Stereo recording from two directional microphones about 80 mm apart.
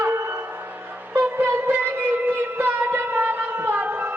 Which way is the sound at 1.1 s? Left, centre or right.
Right.